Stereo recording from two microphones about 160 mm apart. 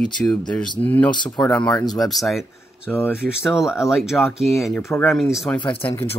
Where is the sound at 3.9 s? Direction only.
Centre (ahead or behind).